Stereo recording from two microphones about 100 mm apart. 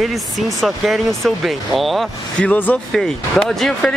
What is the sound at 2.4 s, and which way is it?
Speech, 15° left (ahead or behind).